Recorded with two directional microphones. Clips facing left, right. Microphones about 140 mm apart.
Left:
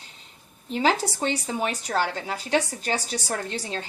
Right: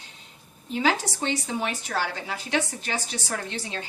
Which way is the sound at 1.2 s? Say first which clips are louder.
Left 1 dB; 40° left (ahead or behind).